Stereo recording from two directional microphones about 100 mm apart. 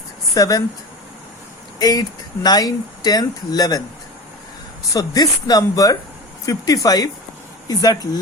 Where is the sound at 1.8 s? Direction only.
40° left (ahead or behind).